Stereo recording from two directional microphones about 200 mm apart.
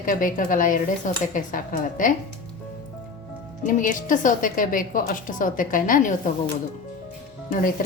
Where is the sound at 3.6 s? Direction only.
40° left (ahead or behind).